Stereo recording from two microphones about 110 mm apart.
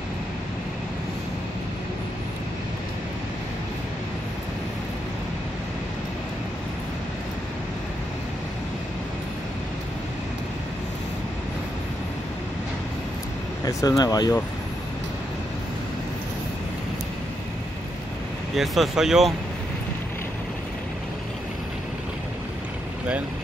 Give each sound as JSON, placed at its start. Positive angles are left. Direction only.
{"t": 13.7, "sound": "speech", "side_deg": 30}
{"t": 18.6, "sound": "speech", "side_deg": -5}